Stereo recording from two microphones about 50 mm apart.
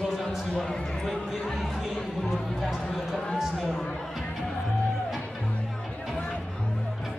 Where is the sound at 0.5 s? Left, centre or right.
Centre.